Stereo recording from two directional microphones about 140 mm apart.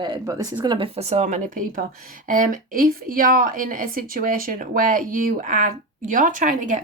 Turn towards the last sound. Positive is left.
turn(degrees=-65)  # may be behind; listen again after turning